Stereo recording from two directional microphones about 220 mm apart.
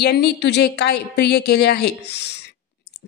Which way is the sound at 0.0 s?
50° left (ahead or behind).